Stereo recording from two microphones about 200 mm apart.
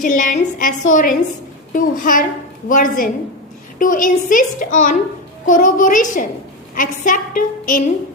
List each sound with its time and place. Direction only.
0.0 s a woman's voice: 40° left (ahead or behind)